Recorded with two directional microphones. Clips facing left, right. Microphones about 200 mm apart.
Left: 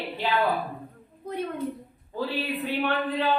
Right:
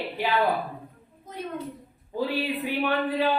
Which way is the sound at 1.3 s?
60° left (ahead or behind).